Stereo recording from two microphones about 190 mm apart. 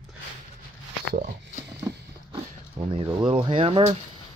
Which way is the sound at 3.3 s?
30° right (ahead or behind).